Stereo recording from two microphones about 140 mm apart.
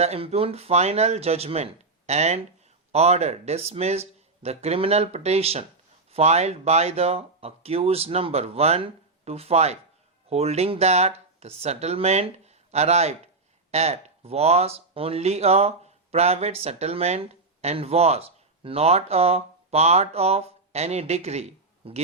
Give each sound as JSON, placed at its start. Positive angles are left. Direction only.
{"t": 0.0, "sound": "speech", "side_deg": -50}